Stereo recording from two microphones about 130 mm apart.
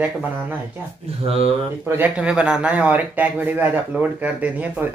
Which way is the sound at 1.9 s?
15° right (ahead or behind).